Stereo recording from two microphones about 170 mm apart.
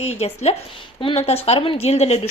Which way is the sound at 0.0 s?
40° left (ahead or behind).